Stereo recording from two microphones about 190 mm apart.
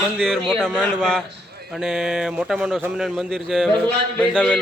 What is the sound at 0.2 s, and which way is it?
A man's voice, 5° left (ahead or behind).